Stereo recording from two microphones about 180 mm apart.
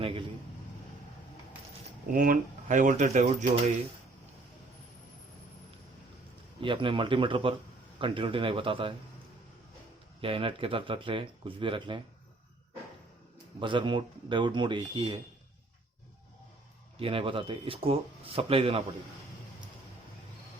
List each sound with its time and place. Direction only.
0.0 s a sound: 30° right (ahead or behind)
2.1 s speech: 50° right (ahead or behind)
6.6 s speech: 25° right (ahead or behind)
10.2 s speech: 30° right (ahead or behind)
13.6 s speech: 25° right (ahead or behind)
17.0 s speech: 30° right (ahead or behind)